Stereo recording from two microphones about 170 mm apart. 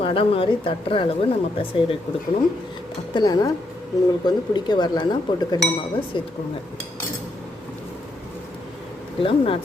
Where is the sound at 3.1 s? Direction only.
25° left (ahead or behind).